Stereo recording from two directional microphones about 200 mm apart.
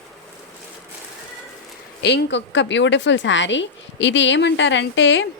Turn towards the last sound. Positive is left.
turn(degrees=65)  # may be behind; listen again after turning